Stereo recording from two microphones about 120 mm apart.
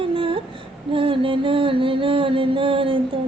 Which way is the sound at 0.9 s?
45° right (ahead or behind).